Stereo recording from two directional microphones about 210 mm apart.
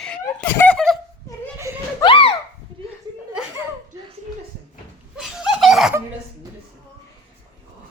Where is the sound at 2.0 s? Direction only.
25° left (ahead or behind).